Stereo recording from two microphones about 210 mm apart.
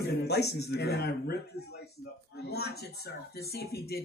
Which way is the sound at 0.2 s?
50° left (ahead or behind).